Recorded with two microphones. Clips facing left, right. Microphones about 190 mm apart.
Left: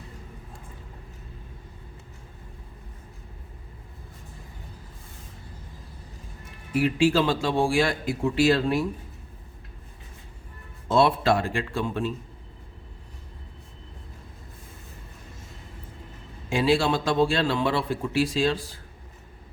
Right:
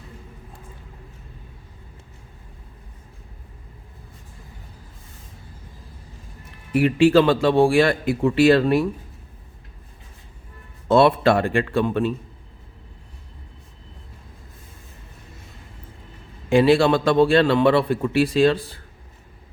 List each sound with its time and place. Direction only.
6.7 s a man's voice: 60° right (ahead or behind)
10.8 s a man's voice: 60° right (ahead or behind)
16.5 s a man's voice: 60° right (ahead or behind)